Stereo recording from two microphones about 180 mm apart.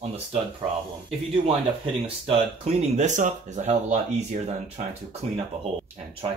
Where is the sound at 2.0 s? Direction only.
35° right (ahead or behind).